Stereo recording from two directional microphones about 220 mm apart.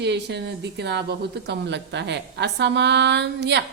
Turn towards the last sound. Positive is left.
turn(degrees=-50)  # may be behind; listen again after turning